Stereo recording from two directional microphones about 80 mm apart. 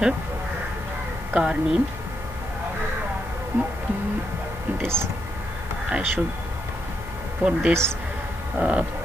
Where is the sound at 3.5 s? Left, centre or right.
Right.